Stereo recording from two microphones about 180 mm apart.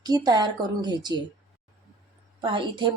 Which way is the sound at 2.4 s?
25° right (ahead or behind).